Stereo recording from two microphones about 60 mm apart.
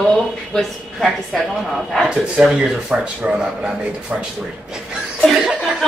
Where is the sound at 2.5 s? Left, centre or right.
Centre.